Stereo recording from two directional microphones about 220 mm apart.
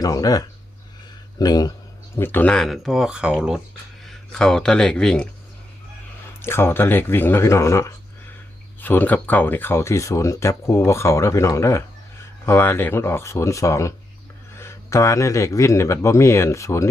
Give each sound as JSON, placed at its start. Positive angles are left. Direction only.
{"t": 0.0, "sound": "speech", "side_deg": 15}
{"t": 6.4, "sound": "speech", "side_deg": 10}